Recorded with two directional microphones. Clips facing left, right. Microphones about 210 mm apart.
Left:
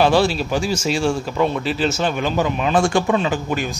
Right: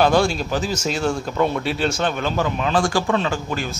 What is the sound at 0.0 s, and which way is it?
A man's voice, 5° left (ahead or behind).